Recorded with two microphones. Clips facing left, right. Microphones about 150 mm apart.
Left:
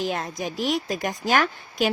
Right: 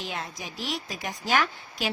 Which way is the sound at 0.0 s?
45° left (ahead or behind).